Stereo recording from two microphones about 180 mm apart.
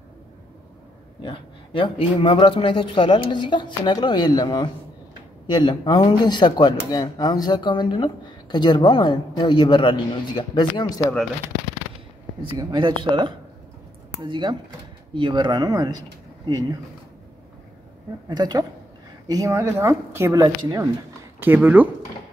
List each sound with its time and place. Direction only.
1.2 s speech: 30° left (ahead or behind)
12.4 s speech: 25° right (ahead or behind)
18.3 s a woman's voice: 25° right (ahead or behind)